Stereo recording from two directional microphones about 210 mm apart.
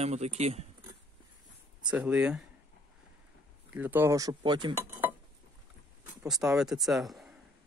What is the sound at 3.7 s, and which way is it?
Speech, 10° right (ahead or behind).